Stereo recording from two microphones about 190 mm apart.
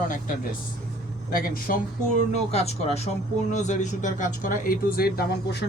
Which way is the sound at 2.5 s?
35° left (ahead or behind).